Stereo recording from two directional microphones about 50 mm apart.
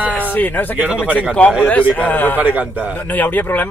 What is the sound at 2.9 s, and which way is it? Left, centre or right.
Speech, left.